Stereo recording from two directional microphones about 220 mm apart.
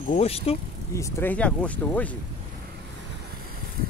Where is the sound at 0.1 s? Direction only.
25° left (ahead or behind).